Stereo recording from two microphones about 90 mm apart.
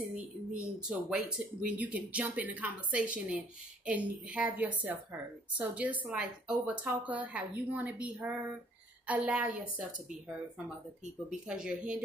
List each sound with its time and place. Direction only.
0.1 s speech: 10° right (ahead or behind)
11.2 s speech: 10° right (ahead or behind)